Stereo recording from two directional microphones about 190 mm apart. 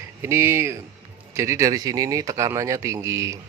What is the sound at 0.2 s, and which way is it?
Speech, 15° right (ahead or behind).